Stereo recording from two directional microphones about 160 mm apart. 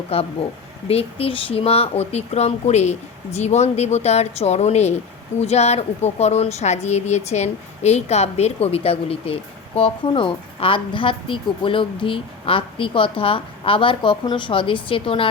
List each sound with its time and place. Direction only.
0.1 s speech: 35° left (ahead or behind)